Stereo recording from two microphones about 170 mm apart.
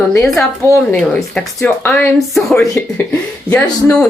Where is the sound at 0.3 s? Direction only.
15° left (ahead or behind).